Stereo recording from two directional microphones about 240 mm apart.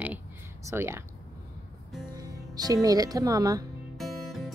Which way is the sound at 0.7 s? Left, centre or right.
Centre.